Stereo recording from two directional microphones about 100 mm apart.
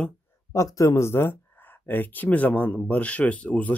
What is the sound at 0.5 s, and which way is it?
Speech, 30° left (ahead or behind).